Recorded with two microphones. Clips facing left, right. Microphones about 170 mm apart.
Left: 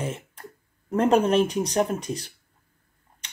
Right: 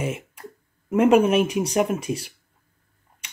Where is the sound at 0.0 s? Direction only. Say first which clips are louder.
Right 3 dB; 10° right (ahead or behind).